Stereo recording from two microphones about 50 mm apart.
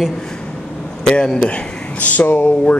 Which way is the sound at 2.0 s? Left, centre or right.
Left.